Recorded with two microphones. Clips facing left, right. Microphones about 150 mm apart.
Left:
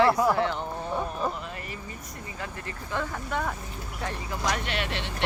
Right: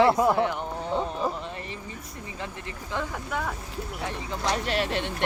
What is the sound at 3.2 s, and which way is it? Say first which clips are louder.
Speech: left 2 dB; centre (ahead or behind).